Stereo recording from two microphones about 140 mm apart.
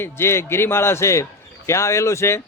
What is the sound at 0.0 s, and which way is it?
A man's voice, 20° left (ahead or behind).